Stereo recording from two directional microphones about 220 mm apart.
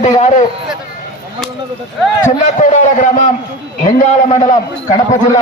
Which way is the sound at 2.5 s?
30° left (ahead or behind).